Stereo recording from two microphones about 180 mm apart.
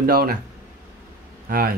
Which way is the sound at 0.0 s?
60° right (ahead or behind).